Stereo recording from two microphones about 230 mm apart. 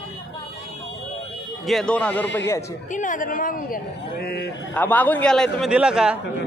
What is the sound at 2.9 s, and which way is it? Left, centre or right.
A man's voice, left.